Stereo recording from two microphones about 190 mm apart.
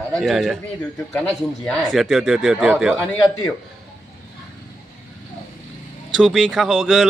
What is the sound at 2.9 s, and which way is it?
Speech, 5° left (ahead or behind).